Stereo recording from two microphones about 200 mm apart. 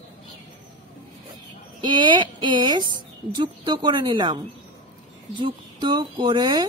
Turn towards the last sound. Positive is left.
turn(degrees=-20)  # may be behind; listen again after turning